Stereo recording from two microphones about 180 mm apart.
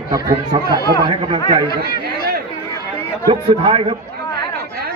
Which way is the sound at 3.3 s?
30° right (ahead or behind).